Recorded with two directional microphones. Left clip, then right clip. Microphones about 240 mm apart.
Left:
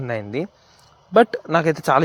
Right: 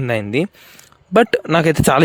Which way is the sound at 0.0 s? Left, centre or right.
Right.